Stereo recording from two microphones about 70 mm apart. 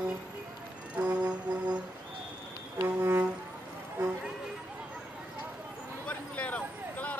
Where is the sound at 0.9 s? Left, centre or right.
Centre.